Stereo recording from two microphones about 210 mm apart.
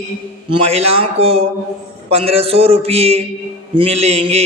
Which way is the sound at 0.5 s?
30° right (ahead or behind).